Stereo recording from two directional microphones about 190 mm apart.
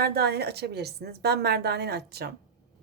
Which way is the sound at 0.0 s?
55° right (ahead or behind).